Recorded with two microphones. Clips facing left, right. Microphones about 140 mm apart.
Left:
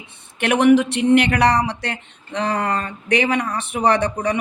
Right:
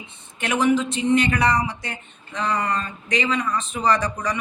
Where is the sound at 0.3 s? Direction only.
70° left (ahead or behind).